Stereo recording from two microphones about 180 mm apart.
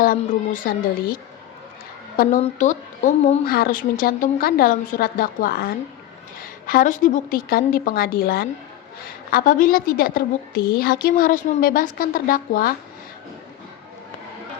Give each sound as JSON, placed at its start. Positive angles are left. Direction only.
{"t": 0.0, "sound": "a woman's voice", "side_deg": 50}
{"t": 2.4, "sound": "speech", "side_deg": 45}
{"t": 3.4, "sound": "a woman's voice", "side_deg": 55}